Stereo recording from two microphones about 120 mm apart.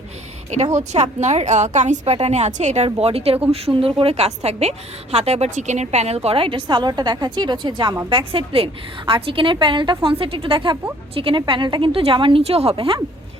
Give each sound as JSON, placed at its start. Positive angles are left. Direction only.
{"t": 0.5, "sound": "a woman's voice", "side_deg": -70}
{"t": 12.4, "sound": "speech", "side_deg": -60}